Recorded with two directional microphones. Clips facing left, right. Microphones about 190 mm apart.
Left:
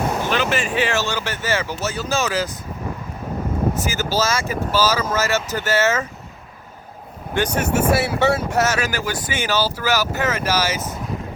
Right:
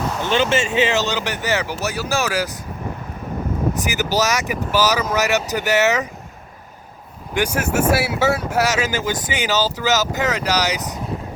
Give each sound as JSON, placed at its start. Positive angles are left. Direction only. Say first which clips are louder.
{"t": 0.3, "sound": "speech", "louder": "right 3 dB", "side_deg": -25}
{"t": 3.8, "sound": "speech", "louder": "right 1 dB", "side_deg": -15}
{"t": 7.3, "sound": "speech", "louder": "even", "side_deg": -10}